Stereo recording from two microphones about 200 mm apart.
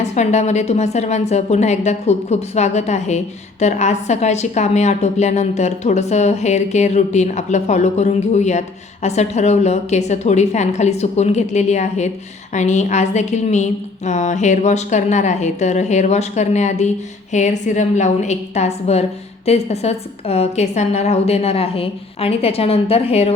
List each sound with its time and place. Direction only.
0.0 s a woman's voice: 35° left (ahead or behind)